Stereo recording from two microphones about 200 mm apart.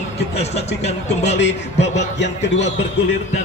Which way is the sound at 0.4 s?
30° left (ahead or behind).